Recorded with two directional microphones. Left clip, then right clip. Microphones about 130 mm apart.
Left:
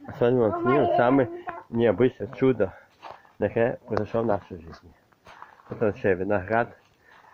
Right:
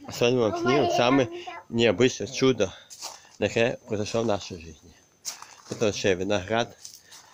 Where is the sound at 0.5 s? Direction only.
10° left (ahead or behind).